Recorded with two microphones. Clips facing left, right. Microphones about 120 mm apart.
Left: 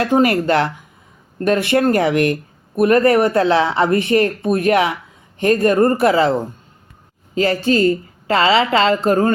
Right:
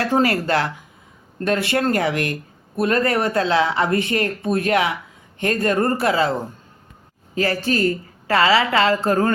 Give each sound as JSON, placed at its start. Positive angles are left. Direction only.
{"t": 0.0, "sound": "speech", "side_deg": 20}
{"t": 7.3, "sound": "speech", "side_deg": 25}